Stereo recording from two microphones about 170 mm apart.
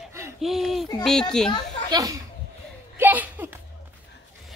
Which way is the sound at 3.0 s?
10° right (ahead or behind).